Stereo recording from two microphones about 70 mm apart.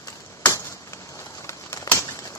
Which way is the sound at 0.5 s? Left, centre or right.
Left.